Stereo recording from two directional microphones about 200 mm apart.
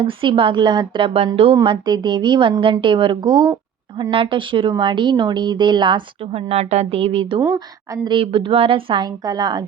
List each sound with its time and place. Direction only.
0.0 s speech: 25° right (ahead or behind)